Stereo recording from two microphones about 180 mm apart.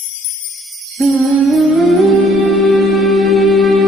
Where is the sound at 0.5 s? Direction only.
Centre (ahead or behind).